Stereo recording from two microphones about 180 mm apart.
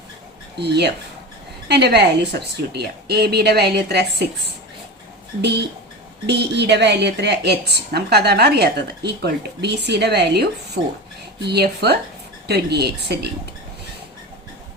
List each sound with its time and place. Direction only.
0.6 s a woman's voice: 65° right (ahead or behind)
5.4 s a woman's voice: 65° right (ahead or behind)